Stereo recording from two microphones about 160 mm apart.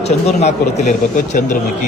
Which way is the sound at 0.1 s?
45° left (ahead or behind).